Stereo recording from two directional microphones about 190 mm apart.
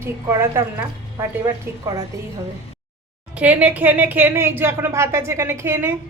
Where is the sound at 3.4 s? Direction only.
10° right (ahead or behind).